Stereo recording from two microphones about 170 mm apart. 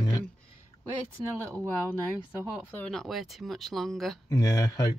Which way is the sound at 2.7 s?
5° left (ahead or behind).